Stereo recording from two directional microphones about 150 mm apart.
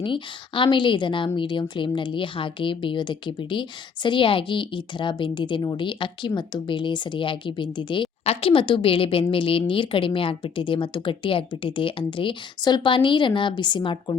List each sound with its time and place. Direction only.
0.0 s speech: 35° left (ahead or behind)